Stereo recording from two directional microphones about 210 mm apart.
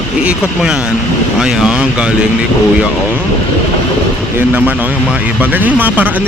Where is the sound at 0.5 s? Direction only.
5° right (ahead or behind).